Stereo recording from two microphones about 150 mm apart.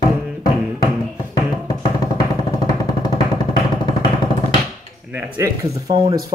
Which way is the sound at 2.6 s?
30° left (ahead or behind).